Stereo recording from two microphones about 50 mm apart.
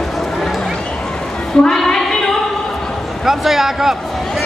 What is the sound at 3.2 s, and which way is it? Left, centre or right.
Speech, centre.